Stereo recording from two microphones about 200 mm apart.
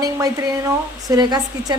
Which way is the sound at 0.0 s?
15° right (ahead or behind).